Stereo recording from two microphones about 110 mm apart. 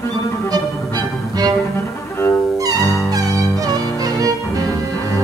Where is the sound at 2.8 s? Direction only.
25° left (ahead or behind).